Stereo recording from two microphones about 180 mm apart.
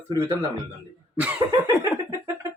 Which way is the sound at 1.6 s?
15° right (ahead or behind).